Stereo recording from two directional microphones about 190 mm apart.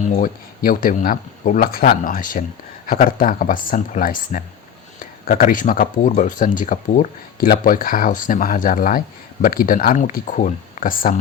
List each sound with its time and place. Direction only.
0.0 s speech: 45° left (ahead or behind)